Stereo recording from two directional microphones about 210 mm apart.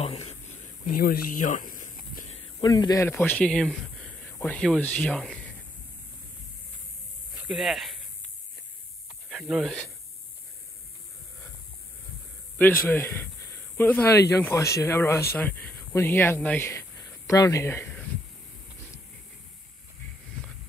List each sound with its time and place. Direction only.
0.0 s a sound: 30° left (ahead or behind)
2.6 s a man's voice: 20° left (ahead or behind); by 5.4 s 5° left (ahead or behind)
7.4 s speech: centre (ahead or behind)
9.3 s speech: centre (ahead or behind)
12.5 s a man's voice: 10° left (ahead or behind)